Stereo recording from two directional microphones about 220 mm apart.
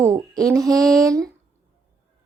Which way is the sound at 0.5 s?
15° right (ahead or behind).